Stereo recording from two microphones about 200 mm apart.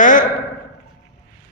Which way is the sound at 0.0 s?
40° left (ahead or behind).